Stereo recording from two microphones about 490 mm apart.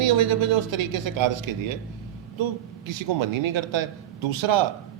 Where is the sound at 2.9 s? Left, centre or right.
Right.